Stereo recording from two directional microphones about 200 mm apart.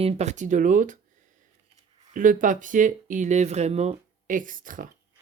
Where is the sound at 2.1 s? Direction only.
40° right (ahead or behind).